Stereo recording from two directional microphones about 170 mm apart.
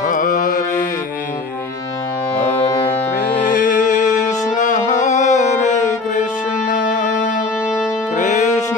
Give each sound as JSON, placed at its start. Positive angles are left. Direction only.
{"t": 0.0, "sound": "carnatic music", "side_deg": 50}
{"t": 2.6, "sound": "music", "side_deg": 25}
{"t": 3.3, "sound": "music", "side_deg": 50}